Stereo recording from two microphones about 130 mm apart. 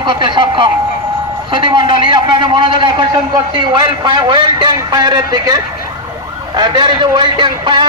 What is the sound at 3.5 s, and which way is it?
A man's voice, 35° right (ahead or behind).